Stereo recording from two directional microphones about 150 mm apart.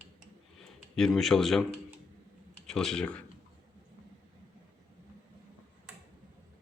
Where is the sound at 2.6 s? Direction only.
5° left (ahead or behind).